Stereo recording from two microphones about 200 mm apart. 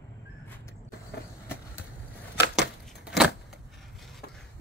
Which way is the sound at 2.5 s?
Centre (ahead or behind).